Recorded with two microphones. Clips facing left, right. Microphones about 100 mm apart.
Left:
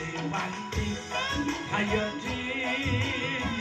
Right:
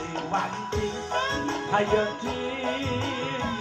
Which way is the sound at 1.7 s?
35° right (ahead or behind).